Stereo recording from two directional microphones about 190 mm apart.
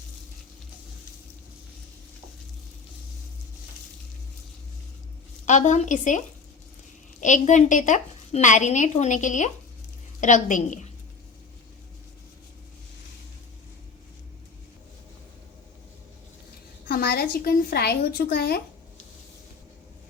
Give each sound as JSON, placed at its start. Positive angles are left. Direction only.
{"t": 5.5, "sound": "a woman's voice", "side_deg": 40}
{"t": 16.9, "sound": "a woman's voice", "side_deg": 55}